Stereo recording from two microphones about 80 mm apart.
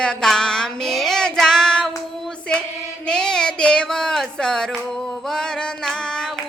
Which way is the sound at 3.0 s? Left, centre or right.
Centre.